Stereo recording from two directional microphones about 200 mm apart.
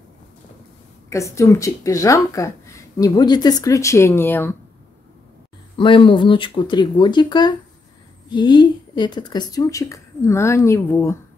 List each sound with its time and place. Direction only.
1.1 s a woman's voice: 15° left (ahead or behind)
5.8 s a woman's voice: 25° left (ahead or behind)